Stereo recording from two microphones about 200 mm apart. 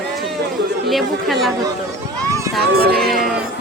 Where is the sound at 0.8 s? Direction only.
Centre (ahead or behind).